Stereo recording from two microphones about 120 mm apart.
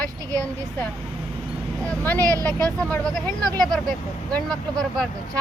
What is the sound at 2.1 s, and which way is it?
Speech, 30° right (ahead or behind).